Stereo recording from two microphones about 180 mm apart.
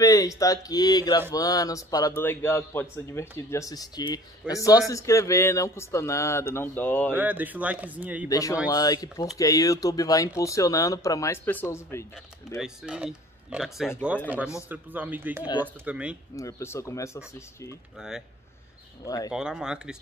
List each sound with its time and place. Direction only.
0.0 s a man's voice: 20° left (ahead or behind)
7.2 s speech: 10° right (ahead or behind)
8.3 s a man's voice: 20° left (ahead or behind)
12.5 s speech: 5° right (ahead or behind)
16.3 s a man's voice: 15° left (ahead or behind)
19.0 s speech: 20° left (ahead or behind)
19.3 s speech: 5° right (ahead or behind)